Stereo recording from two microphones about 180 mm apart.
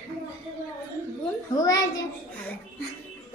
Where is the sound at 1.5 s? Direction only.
20° left (ahead or behind).